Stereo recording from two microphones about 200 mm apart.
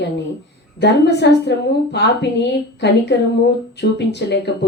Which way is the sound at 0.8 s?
55° left (ahead or behind).